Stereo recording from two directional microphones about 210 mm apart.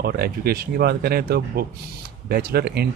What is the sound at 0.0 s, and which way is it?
Speech, 45° right (ahead or behind).